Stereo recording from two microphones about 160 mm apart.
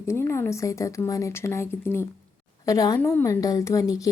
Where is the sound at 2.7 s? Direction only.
20° left (ahead or behind).